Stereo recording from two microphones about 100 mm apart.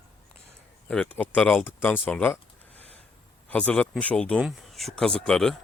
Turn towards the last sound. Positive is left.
turn(degrees=5)  # may be behind; listen again after turning